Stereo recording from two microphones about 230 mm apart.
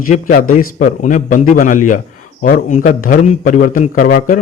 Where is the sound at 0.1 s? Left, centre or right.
Left.